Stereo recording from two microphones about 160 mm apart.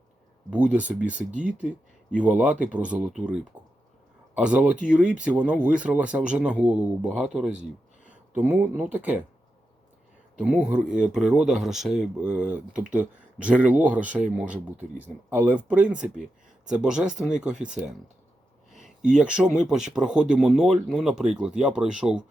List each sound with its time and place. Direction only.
0.5 s speech: 10° right (ahead or behind)
1.3 s speech: 50° right (ahead or behind)
2.1 s speech: 10° right (ahead or behind)
3.5 s a sound: 10° right (ahead or behind)
4.4 s speech: 5° right (ahead or behind)
10.4 s speech: 5° right (ahead or behind)
19.1 s speech: 5° right (ahead or behind)